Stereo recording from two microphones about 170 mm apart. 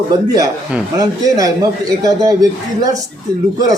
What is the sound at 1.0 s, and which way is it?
A man's voice, 20° right (ahead or behind).